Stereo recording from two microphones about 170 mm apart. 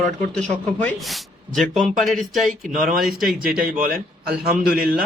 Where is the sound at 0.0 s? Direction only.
5° left (ahead or behind).